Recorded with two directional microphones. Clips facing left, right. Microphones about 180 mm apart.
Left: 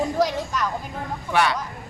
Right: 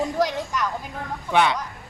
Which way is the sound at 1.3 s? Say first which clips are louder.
Right 1 dB; 20° right (ahead or behind).